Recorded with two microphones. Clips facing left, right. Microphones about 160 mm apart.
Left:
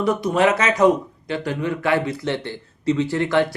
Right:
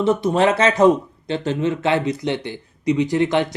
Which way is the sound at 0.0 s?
25° right (ahead or behind).